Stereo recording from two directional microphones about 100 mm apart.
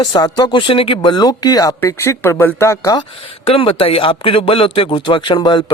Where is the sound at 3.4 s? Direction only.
65° left (ahead or behind).